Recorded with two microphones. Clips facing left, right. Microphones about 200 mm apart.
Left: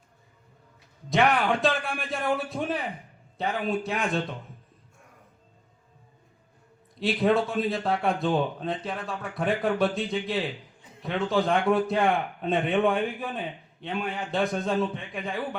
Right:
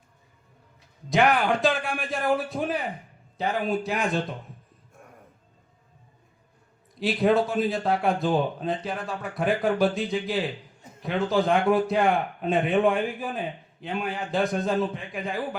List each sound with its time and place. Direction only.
1.1 s a man's voice: centre (ahead or behind)
7.0 s a man's voice: centre (ahead or behind)
10.8 s a sound: 45° right (ahead or behind)
11.0 s a man's voice: centre (ahead or behind)